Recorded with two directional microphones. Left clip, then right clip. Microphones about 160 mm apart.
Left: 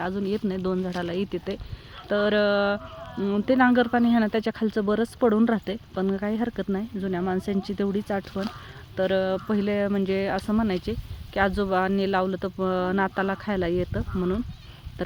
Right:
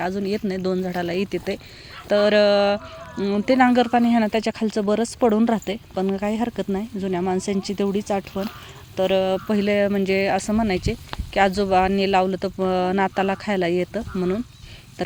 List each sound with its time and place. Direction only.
0.0 s speech: 15° right (ahead or behind)